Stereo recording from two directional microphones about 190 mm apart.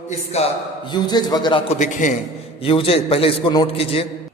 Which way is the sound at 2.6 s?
30° left (ahead or behind).